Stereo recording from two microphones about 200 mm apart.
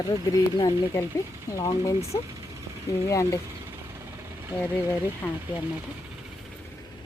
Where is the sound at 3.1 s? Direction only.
15° left (ahead or behind).